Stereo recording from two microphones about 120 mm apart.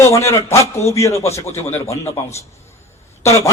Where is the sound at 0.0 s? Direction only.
20° left (ahead or behind).